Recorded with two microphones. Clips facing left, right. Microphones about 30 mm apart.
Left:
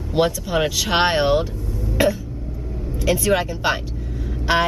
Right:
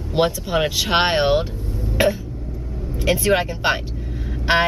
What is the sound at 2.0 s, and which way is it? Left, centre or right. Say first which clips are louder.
Throat clearing: even; right.